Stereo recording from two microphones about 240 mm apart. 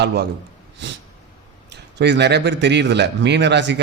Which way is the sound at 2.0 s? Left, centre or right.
Right.